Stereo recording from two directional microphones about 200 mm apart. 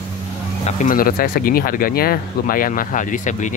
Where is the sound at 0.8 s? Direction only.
45° left (ahead or behind).